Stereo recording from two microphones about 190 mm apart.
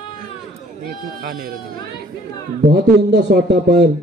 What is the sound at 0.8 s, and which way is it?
Speech, 50° right (ahead or behind).